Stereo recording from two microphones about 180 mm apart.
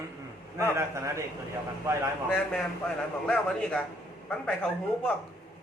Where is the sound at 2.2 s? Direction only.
5° left (ahead or behind).